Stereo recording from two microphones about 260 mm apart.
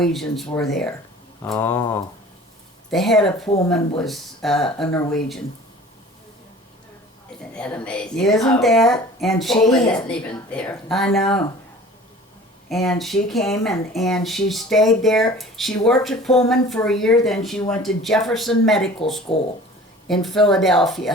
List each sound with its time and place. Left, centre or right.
0.0 s speech: centre
7.5 s speech: centre
12.6 s speech: centre
19.3 s speech: left
20.2 s speech: centre